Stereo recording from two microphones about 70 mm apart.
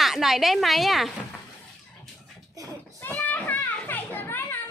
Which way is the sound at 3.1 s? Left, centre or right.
Left.